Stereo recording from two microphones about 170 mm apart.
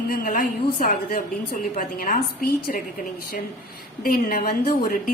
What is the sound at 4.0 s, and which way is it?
A man's voice, 55° left (ahead or behind).